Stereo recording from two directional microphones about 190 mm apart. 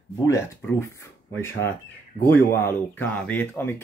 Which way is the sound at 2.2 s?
10° left (ahead or behind).